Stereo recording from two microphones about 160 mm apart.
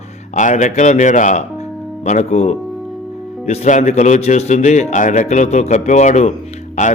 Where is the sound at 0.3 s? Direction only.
50° left (ahead or behind).